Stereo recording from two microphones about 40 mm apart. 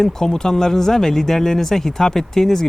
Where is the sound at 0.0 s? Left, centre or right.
Centre.